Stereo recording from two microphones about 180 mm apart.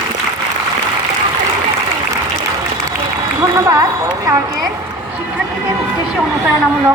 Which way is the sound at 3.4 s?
20° right (ahead or behind).